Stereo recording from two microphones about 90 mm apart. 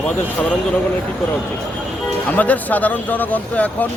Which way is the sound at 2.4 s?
20° left (ahead or behind).